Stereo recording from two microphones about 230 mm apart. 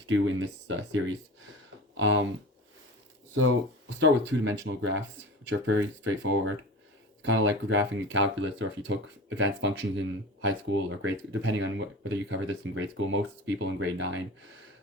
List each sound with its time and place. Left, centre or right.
0.1 s speech: right
2.0 s speech: right
3.3 s speech: right